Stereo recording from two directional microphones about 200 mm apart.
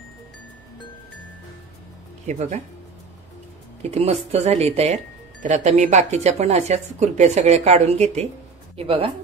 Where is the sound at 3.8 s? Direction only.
30° right (ahead or behind).